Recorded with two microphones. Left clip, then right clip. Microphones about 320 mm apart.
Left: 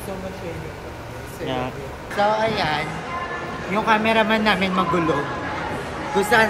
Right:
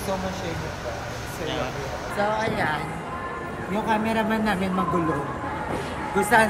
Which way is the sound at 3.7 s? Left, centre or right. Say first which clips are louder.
Left 6 dB; centre.